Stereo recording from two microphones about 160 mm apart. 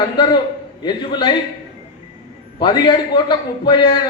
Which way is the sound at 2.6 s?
30° left (ahead or behind).